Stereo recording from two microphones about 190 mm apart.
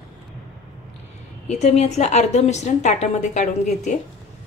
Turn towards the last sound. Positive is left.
turn(degrees=40)  # may be behind; listen again after turning